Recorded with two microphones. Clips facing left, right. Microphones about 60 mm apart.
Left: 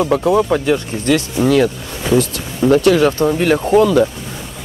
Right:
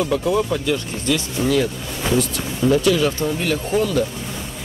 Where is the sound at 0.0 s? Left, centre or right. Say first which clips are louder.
Left 5 dB; left.